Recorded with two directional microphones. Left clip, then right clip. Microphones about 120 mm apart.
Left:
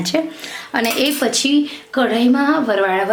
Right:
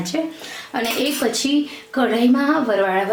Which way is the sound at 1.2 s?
50° left (ahead or behind).